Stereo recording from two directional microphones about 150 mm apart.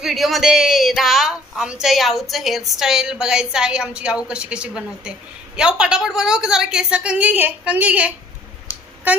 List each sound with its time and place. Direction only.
0.0 s a woman's voice: centre (ahead or behind)